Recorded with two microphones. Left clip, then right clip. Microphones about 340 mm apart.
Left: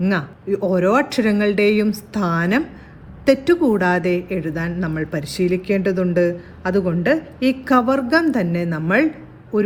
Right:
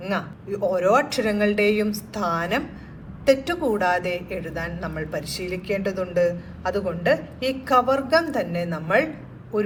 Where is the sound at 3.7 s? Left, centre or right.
Left.